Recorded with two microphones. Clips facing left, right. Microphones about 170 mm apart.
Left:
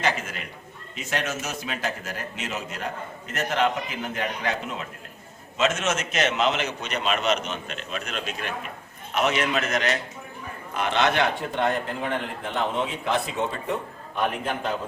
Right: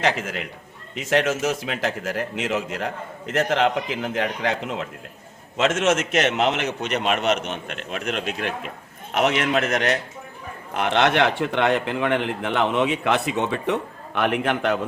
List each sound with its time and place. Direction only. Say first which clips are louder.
0.0 s a man's voice: right 4 dB; 80° right
0.9 s a man's voice: right 8 dB; 90° right; by 14.8 s 70° right (ahead or behind)